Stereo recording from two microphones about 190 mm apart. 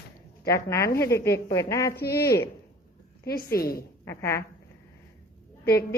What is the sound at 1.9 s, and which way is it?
A woman's voice, 55° left (ahead or behind).